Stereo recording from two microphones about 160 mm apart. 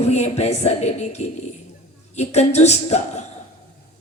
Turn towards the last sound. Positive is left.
turn(degrees=45)  # may be behind; listen again after turning